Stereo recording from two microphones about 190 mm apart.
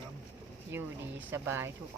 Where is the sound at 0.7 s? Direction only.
10° right (ahead or behind).